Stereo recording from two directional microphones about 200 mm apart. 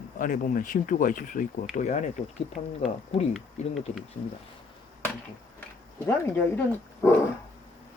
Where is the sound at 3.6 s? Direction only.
30° left (ahead or behind).